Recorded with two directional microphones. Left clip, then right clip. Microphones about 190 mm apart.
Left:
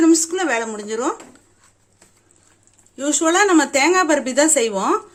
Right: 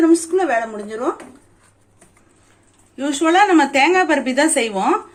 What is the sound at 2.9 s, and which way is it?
Speech, 45° left (ahead or behind).